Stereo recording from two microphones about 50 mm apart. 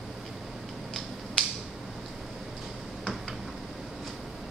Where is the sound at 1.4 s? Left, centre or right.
Centre.